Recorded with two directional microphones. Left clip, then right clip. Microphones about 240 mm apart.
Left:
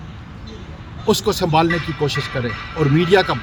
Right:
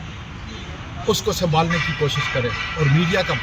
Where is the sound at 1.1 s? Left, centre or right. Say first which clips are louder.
Left 3 dB; centre.